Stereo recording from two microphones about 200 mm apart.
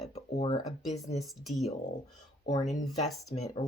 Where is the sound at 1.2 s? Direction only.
Centre (ahead or behind).